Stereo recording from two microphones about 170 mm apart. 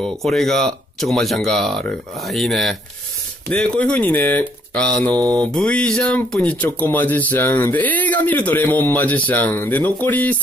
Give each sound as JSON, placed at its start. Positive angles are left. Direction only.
{"t": 0.0, "sound": "speech", "side_deg": 0}